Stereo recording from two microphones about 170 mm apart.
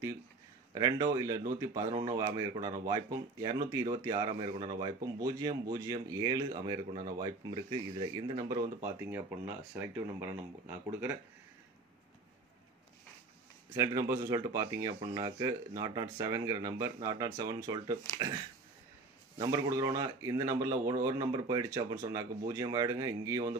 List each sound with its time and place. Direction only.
0.7 s speech: 20° right (ahead or behind)
4.3 s speech: 35° right (ahead or behind)
4.7 s speech: 20° right (ahead or behind)
13.7 s speech: 15° right (ahead or behind)
19.4 s speech: 20° right (ahead or behind)